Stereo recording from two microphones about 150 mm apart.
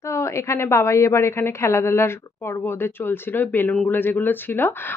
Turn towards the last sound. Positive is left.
turn(degrees=15)  # may be behind; listen again after turning